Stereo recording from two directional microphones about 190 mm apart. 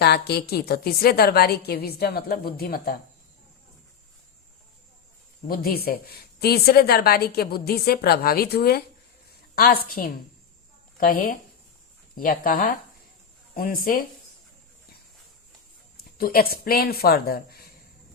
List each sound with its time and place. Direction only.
0.0 s a woman's voice: 60° left (ahead or behind)
5.5 s a woman's voice: 50° left (ahead or behind)
16.1 s speech: 50° left (ahead or behind)